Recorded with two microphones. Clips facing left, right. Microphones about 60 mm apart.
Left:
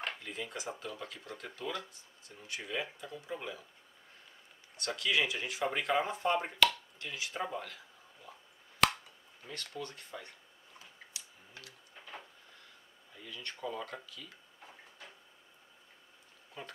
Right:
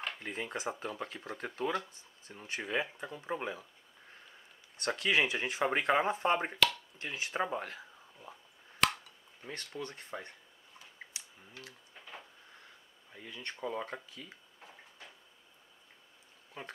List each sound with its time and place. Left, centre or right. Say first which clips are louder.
0.2 s speech: right 4 dB; right
4.8 s speech: right 2 dB; right
8.8 s a sound: left 2 dB; centre
9.5 s speech: right 1 dB; right
11.1 s a sound: left 2 dB; right
13.1 s speech: right 1 dB; right
16.6 s speech: right 1 dB; right